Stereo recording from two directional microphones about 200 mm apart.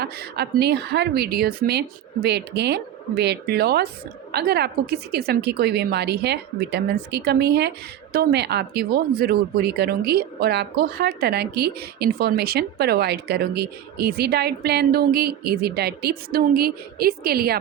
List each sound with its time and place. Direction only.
0.0 s a woman's voice: 55° right (ahead or behind)